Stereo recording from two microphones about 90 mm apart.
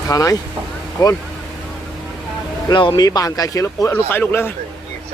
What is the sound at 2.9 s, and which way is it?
Speech, 45° left (ahead or behind).